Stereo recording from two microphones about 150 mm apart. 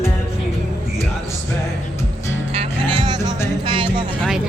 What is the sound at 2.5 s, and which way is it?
Music, 35° right (ahead or behind).